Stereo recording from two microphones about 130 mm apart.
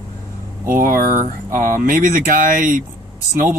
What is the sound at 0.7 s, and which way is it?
Speech, 90° right.